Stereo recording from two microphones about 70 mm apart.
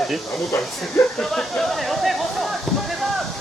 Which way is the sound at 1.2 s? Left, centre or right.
Centre.